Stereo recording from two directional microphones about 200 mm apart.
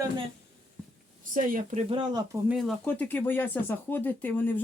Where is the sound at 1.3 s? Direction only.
40° right (ahead or behind).